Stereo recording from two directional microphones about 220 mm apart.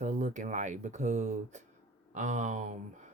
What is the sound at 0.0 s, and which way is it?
Speech, 35° right (ahead or behind).